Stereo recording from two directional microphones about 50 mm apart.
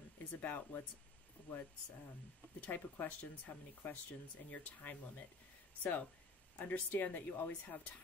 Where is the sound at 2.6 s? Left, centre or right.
Left.